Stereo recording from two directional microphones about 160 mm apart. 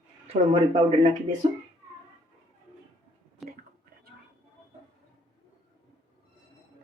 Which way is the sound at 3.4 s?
Centre (ahead or behind).